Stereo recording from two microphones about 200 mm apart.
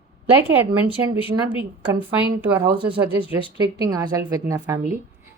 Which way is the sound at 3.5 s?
20° right (ahead or behind).